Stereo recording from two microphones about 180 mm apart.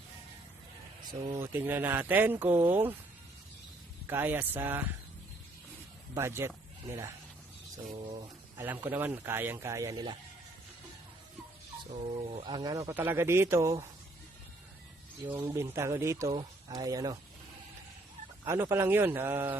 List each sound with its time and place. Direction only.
1.0 s speech: 30° right (ahead or behind)
1.4 s speech: 10° right (ahead or behind)
4.0 s speech: 10° right (ahead or behind)
6.1 s speech: 15° right (ahead or behind)
7.9 s speech: 30° right (ahead or behind)
8.5 s speech: 10° right (ahead or behind)
11.9 s speech: 35° right (ahead or behind)
12.9 s speech: 10° right (ahead or behind)
15.3 s speech: 15° right (ahead or behind)
18.4 s speech: 15° right (ahead or behind)